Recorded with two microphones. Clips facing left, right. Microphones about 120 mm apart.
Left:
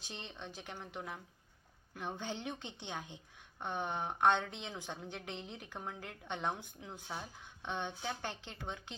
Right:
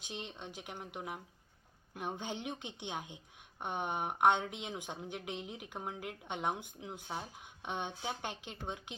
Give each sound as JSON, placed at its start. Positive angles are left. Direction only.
{"t": 0.0, "sound": "speech", "side_deg": -15}